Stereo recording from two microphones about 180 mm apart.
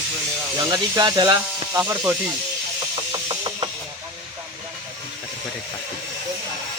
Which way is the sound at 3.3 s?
25° right (ahead or behind).